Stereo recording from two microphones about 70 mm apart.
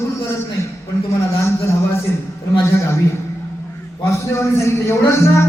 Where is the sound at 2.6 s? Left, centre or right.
Left.